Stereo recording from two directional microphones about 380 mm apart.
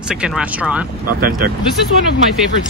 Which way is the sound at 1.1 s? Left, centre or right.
Right.